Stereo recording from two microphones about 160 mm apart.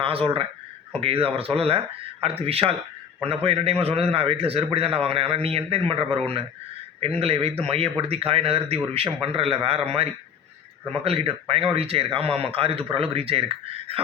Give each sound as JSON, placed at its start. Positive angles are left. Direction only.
{"t": 0.0, "sound": "speech", "side_deg": -35}